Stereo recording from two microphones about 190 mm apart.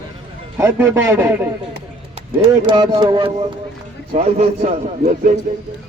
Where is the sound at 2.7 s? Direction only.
25° right (ahead or behind).